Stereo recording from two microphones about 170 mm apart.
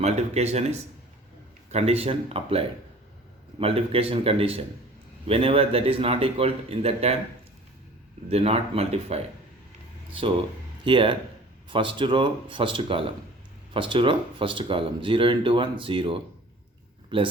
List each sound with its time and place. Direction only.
0.0 s a man's voice: 40° right (ahead or behind)
8.3 s a man's voice: 35° right (ahead or behind)
10.8 s a man's voice: 30° right (ahead or behind)